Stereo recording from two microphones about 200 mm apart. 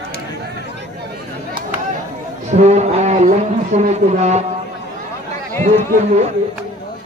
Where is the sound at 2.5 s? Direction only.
35° right (ahead or behind).